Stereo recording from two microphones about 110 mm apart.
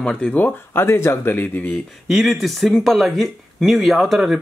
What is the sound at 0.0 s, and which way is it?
Speech, 5° left (ahead or behind).